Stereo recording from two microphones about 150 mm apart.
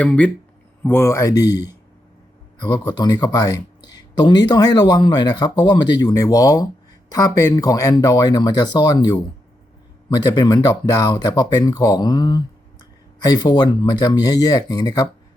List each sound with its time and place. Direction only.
0.0 s speech: 10° left (ahead or behind)
2.6 s speech: 30° left (ahead or behind)